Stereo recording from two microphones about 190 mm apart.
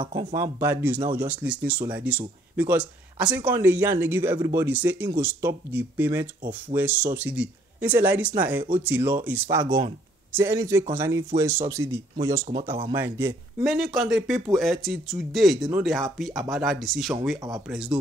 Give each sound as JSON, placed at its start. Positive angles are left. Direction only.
{"t": 0.0, "sound": "speech", "side_deg": -25}
{"t": 0.3, "sound": "speech", "side_deg": -15}
{"t": 13.7, "sound": "speech", "side_deg": 0}